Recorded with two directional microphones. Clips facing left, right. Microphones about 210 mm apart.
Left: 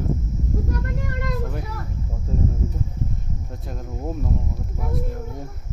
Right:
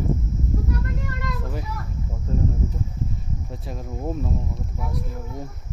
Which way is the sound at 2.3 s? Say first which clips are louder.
Even; 5° left (ahead or behind).